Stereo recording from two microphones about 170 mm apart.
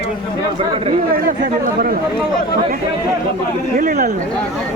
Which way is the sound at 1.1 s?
55° right (ahead or behind).